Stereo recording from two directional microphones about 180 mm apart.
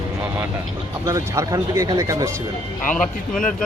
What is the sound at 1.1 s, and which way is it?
Speech, 15° right (ahead or behind).